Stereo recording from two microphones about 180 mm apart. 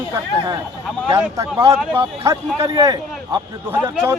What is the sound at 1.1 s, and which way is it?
Speech, 15° right (ahead or behind).